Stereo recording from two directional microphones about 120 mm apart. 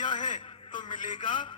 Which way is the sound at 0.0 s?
40° left (ahead or behind).